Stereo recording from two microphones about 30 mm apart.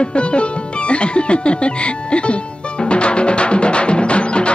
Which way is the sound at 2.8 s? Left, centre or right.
Left.